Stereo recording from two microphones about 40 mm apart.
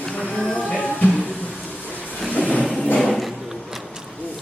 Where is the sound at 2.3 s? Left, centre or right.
Left.